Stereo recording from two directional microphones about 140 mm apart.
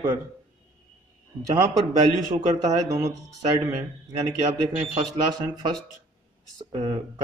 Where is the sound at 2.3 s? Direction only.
25° right (ahead or behind).